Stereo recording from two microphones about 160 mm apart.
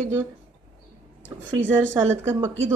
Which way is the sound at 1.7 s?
15° right (ahead or behind).